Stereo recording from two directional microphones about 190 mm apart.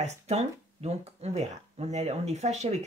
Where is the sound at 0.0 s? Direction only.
35° right (ahead or behind).